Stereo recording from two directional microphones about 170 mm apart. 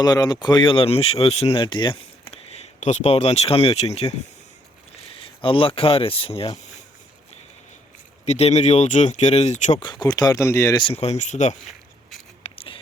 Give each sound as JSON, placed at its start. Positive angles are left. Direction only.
{"t": 0.0, "sound": "speech", "side_deg": 20}
{"t": 5.4, "sound": "speech", "side_deg": 30}
{"t": 8.2, "sound": "speech", "side_deg": 40}
{"t": 9.8, "sound": "speech", "side_deg": 25}
{"t": 10.9, "sound": "speech", "side_deg": 40}
{"t": 12.4, "sound": "a sound", "side_deg": 35}